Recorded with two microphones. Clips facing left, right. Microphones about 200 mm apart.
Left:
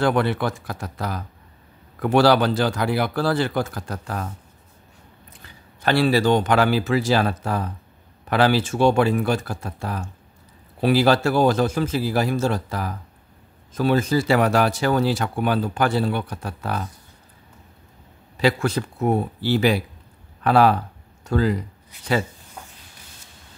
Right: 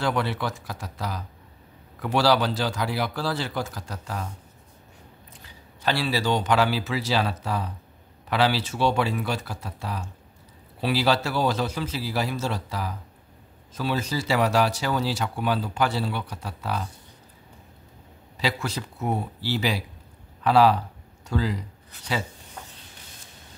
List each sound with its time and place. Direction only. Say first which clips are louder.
0.0 s a man's voice: left 6 dB; 55° left (ahead or behind)
5.4 s speech: left 3 dB; 55° left (ahead or behind)
18.4 s speech: left 8 dB; 55° left (ahead or behind)